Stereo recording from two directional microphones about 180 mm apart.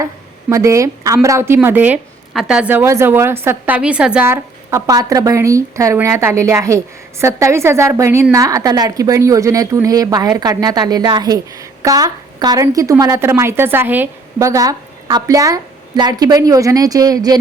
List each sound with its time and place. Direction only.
0.5 s a woman's voice: 15° right (ahead or behind)